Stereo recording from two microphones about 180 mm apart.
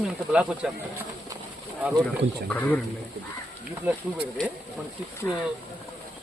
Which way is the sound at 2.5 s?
10° left (ahead or behind).